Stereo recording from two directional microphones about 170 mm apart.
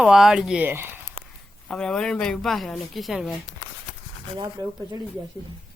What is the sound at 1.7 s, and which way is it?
A woman's voice, 5° left (ahead or behind).